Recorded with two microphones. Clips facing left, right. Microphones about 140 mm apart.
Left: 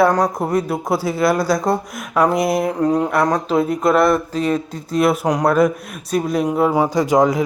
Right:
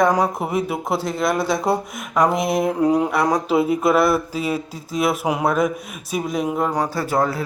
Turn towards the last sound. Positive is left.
turn(degrees=15)  # may be behind; listen again after turning